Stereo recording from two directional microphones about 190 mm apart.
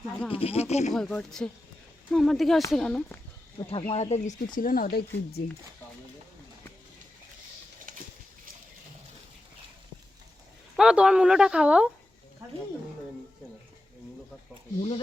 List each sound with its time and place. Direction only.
0.3 s speech: 30° left (ahead or behind)
0.9 s speech: centre (ahead or behind)
3.7 s speech: 30° left (ahead or behind); by 5.4 s 55° left (ahead or behind)
7.9 s a sound: 45° right (ahead or behind)
10.8 s speech: 5° right (ahead or behind)
14.8 s speech: 30° left (ahead or behind)